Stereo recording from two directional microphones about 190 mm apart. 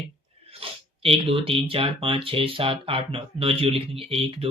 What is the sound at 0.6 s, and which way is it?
Speech, 30° right (ahead or behind).